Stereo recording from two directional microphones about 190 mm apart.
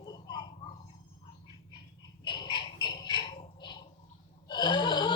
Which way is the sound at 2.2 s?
25° left (ahead or behind).